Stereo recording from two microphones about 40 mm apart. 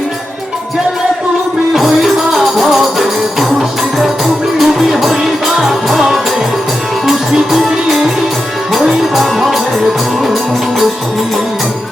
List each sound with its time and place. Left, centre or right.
1.7 s music: centre
4.5 s music: centre